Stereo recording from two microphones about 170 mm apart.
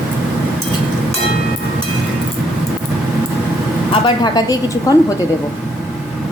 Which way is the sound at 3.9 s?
25° left (ahead or behind).